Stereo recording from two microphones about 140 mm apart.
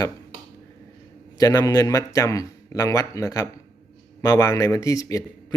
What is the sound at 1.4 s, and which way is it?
Speech, 25° left (ahead or behind).